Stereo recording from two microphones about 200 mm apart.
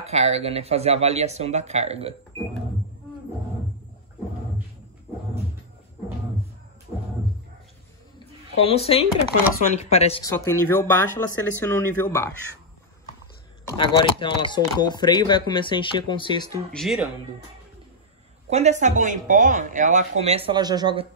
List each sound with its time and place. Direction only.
0.0 s speech: 35° right (ahead or behind)
8.6 s speech: 30° left (ahead or behind)
10.2 s speech: 15° left (ahead or behind)
13.7 s speech: 25° left (ahead or behind)
16.7 s speech: centre (ahead or behind)
18.5 s speech: 35° right (ahead or behind)